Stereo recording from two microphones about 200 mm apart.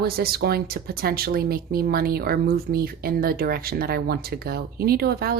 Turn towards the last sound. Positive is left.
turn(degrees=-50)  # may be behind; listen again after turning